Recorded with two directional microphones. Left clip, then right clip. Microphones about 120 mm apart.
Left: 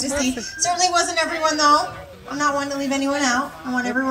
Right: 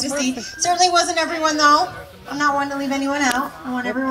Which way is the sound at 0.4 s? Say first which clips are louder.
Right 5 dB; 40° left (ahead or behind).